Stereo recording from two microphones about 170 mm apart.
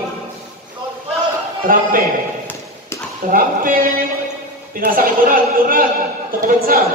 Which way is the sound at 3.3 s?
55° right (ahead or behind).